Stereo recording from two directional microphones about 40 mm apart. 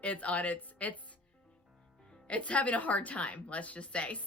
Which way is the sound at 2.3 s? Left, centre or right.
Left.